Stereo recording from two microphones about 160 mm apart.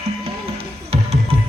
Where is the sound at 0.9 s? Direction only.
40° right (ahead or behind).